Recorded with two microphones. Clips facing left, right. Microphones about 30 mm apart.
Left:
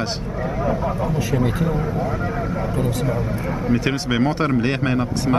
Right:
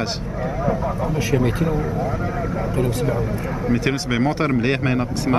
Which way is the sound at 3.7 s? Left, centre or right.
Centre.